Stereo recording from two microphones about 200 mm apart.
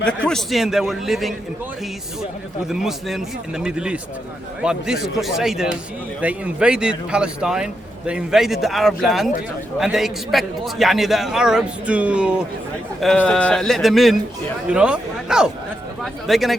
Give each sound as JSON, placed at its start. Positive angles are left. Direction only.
{"t": 0.3, "sound": "a man's voice", "side_deg": 0}
{"t": 2.6, "sound": "a man's voice", "side_deg": 0}